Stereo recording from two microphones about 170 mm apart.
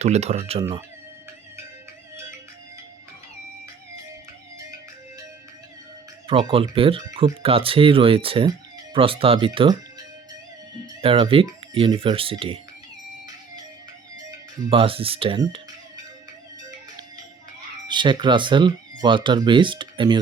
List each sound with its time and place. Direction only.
0.0 s speech: 40° right (ahead or behind)
6.2 s speech: 35° right (ahead or behind)
11.0 s speech: 30° right (ahead or behind)
14.7 s speech: 35° right (ahead or behind)
17.8 s speech: 25° right (ahead or behind)